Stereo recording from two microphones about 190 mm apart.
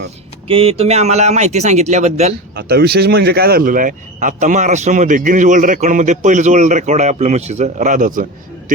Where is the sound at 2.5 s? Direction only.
55° right (ahead or behind).